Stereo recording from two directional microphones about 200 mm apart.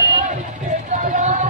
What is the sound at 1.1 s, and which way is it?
Run, 35° right (ahead or behind).